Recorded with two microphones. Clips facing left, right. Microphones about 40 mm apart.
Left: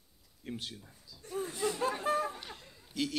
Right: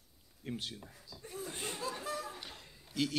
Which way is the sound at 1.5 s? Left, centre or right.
Right.